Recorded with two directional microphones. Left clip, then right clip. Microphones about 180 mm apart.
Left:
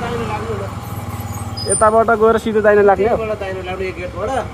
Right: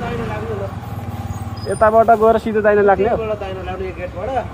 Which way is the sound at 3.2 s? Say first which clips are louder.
Left 1 dB; 30° left (ahead or behind).